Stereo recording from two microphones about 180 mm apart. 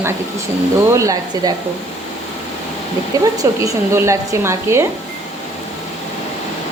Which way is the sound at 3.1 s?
20° right (ahead or behind).